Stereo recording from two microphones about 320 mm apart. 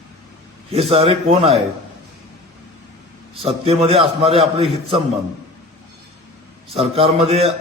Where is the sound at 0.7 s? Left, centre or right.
Centre.